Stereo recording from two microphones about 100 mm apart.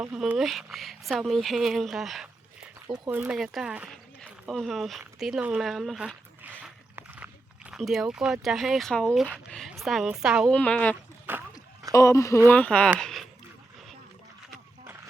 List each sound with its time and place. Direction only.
0.0 s speech: 15° right (ahead or behind)
2.8 s speech: 45° right (ahead or behind)
3.1 s speech: 15° right (ahead or behind)
3.3 s speech: 5° right (ahead or behind)
4.2 s speech: 5° left (ahead or behind)
6.4 s a sound: 15° right (ahead or behind)
7.8 s speech: centre (ahead or behind)
10.5 s speech: 10° left (ahead or behind)
11.3 s speech: 20° right (ahead or behind)
11.9 s speech: 30° left (ahead or behind)
12.5 s speech: 15° left (ahead or behind)
13.0 s a sound: 5° left (ahead or behind)